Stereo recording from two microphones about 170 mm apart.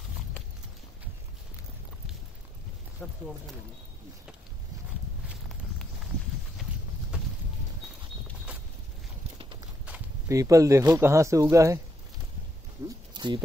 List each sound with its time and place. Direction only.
3.0 s speech: 10° left (ahead or behind)
9.8 s speech: 15° right (ahead or behind)
12.8 s a sound: 25° right (ahead or behind)